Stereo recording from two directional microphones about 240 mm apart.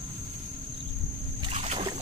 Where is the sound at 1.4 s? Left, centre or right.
Right.